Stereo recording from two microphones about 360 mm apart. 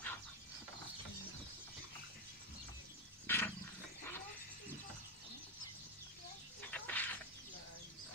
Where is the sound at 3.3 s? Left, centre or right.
Centre.